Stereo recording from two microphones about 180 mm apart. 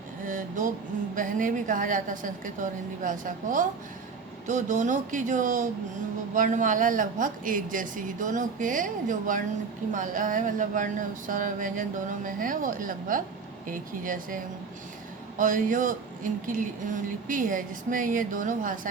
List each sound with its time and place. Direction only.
0.3 s a woman's voice: 45° right (ahead or behind)